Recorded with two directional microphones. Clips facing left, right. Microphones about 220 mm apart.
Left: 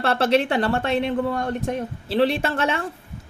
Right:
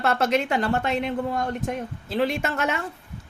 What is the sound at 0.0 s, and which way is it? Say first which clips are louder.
Speech: left 3 dB; 30° left (ahead or behind).